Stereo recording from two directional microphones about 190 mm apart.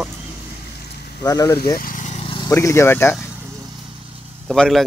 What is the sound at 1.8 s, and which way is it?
Vehicle, 45° left (ahead or behind).